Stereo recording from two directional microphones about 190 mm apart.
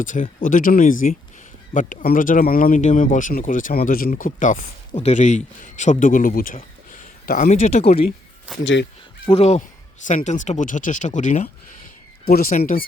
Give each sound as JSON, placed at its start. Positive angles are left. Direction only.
{"t": 0.0, "sound": "speech", "side_deg": 45}
{"t": 8.6, "sound": "speech", "side_deg": 70}
{"t": 9.3, "sound": "speech", "side_deg": 35}